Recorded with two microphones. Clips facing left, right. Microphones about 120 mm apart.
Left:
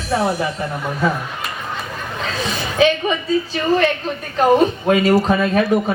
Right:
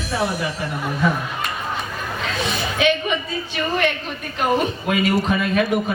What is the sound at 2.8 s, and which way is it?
Music, 35° left (ahead or behind).